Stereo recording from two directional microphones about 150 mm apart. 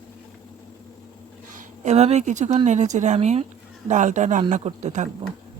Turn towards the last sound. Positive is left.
turn(degrees=-50)  # may be behind; listen again after turning